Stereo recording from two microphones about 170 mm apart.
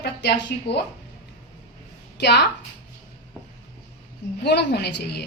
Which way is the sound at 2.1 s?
80° left.